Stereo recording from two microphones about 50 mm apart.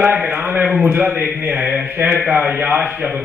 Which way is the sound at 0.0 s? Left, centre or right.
Right.